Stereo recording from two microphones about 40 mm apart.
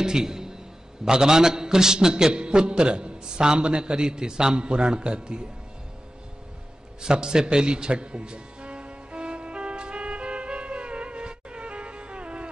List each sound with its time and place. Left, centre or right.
0.0 s a man's voice: centre
7.0 s music: centre